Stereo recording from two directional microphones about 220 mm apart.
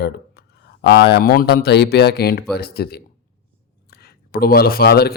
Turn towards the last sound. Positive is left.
turn(degrees=45)  # may be behind; listen again after turning